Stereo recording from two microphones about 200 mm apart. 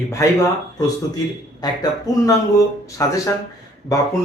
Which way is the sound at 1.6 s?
20° left (ahead or behind).